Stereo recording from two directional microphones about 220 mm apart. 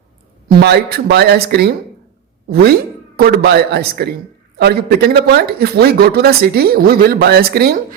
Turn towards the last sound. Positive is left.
turn(degrees=-45)  # may be behind; listen again after turning